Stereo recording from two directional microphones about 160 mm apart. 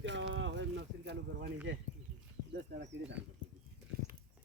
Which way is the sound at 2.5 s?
90° right.